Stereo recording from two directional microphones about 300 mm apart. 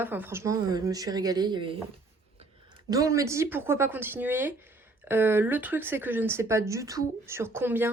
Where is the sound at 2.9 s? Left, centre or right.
Centre.